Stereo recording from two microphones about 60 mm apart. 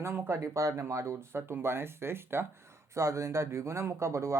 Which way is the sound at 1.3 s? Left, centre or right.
Right.